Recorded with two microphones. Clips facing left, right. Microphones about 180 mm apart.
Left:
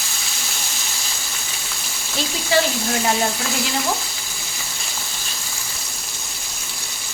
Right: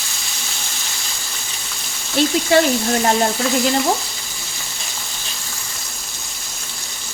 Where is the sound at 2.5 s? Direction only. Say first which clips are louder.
Right 4 dB; 55° right (ahead or behind).